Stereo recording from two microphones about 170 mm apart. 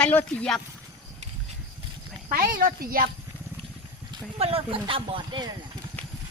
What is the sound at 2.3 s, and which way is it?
Speech, 55° right (ahead or behind).